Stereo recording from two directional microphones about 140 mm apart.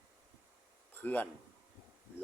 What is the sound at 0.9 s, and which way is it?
Speech, 15° left (ahead or behind).